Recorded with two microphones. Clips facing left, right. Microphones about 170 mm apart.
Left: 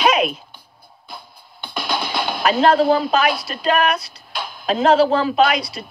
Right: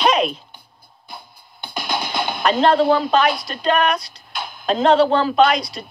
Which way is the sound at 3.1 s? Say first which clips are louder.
Right 1 dB; 5° left (ahead or behind).